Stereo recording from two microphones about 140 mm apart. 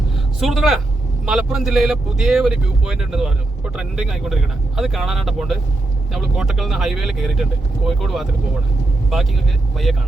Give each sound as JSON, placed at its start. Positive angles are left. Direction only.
{"t": 0.3, "sound": "a man's voice", "side_deg": 0}
{"t": 9.9, "sound": "speech", "side_deg": 0}